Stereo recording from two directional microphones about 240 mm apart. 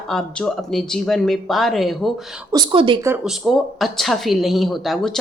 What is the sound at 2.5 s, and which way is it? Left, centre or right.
Speech, centre.